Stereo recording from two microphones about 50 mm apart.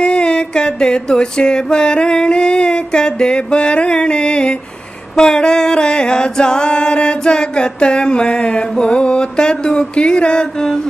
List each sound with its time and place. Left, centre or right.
0.0 s singing: centre